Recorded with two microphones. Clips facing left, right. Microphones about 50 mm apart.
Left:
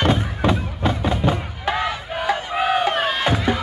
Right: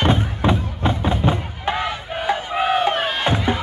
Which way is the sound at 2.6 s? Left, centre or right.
Centre.